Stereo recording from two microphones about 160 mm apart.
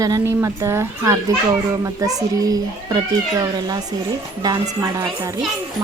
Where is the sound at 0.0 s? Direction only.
20° right (ahead or behind).